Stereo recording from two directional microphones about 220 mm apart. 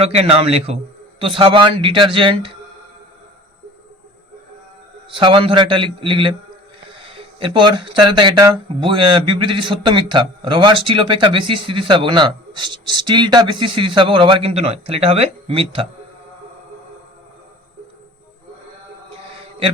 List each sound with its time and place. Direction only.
0.0 s speech: 30° right (ahead or behind)
5.1 s speech: 25° right (ahead or behind)